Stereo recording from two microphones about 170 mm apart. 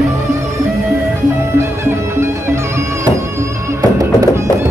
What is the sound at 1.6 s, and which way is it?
Music, 15° right (ahead or behind).